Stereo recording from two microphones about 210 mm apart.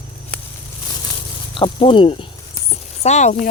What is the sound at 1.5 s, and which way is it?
Speech, 25° left (ahead or behind).